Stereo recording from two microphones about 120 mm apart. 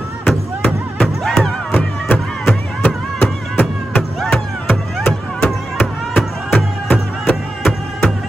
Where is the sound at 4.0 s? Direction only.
5° left (ahead or behind).